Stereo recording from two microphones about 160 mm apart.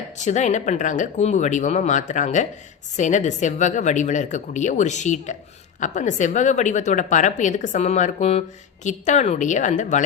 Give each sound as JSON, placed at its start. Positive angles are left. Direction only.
{"t": 0.2, "sound": "a woman's voice", "side_deg": 45}